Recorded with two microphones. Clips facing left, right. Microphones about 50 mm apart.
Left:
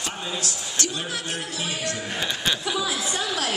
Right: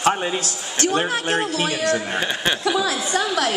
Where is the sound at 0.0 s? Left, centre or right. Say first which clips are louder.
Right 10 dB; right.